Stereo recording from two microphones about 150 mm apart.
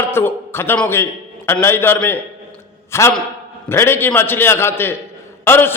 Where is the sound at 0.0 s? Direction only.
15° left (ahead or behind).